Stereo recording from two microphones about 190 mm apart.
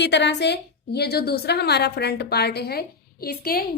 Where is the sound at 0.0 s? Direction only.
65° left (ahead or behind).